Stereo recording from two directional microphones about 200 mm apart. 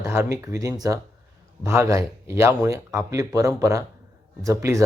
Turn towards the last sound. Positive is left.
turn(degrees=-15)  # may be behind; listen again after turning